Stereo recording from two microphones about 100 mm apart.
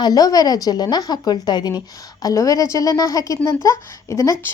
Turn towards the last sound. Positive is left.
turn(degrees=30)  # may be behind; listen again after turning